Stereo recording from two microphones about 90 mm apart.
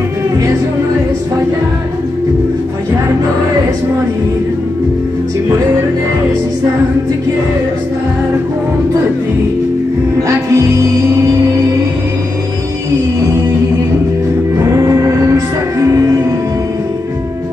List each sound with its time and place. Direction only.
10.2 s music: 35° right (ahead or behind)
14.8 s music: 35° right (ahead or behind)